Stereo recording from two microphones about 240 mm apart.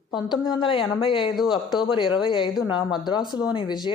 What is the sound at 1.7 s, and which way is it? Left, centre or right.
A woman's voice, left.